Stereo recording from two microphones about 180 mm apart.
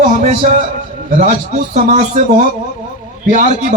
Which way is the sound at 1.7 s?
40° right (ahead or behind).